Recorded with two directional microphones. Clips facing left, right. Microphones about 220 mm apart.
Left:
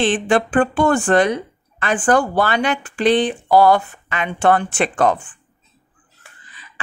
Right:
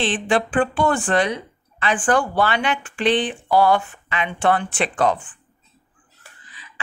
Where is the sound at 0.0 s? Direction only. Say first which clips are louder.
Left 4 dB; 45° left (ahead or behind).